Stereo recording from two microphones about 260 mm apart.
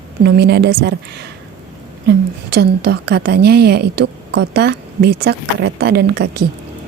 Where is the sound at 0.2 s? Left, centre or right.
Right.